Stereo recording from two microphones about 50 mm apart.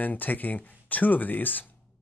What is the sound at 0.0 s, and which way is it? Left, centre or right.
Speech, left.